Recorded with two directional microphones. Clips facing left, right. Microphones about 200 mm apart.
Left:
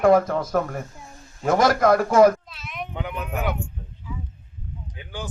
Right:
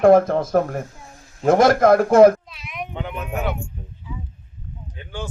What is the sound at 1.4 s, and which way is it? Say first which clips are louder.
Speech: right 4 dB; 50° right (ahead or behind).